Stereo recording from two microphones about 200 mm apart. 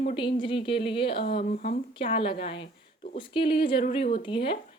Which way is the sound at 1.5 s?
40° left (ahead or behind).